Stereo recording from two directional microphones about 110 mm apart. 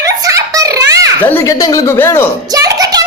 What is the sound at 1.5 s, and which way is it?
Speech, 35° left (ahead or behind).